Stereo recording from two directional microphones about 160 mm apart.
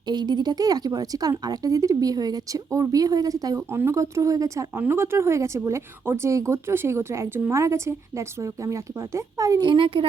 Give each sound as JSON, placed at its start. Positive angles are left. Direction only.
{"t": 0.1, "sound": "speech", "side_deg": -25}